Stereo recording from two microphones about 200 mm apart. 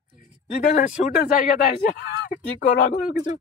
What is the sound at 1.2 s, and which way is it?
Speech, 45° left (ahead or behind).